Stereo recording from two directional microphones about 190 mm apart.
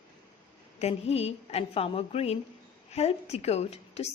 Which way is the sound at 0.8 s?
35° left (ahead or behind).